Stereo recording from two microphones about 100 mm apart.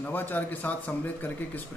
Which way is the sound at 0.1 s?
20° left (ahead or behind).